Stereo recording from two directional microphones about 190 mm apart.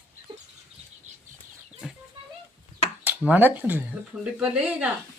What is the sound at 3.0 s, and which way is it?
Speech, 10° right (ahead or behind).